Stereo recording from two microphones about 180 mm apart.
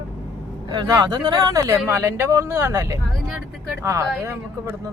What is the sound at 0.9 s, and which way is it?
Speech, 25° right (ahead or behind).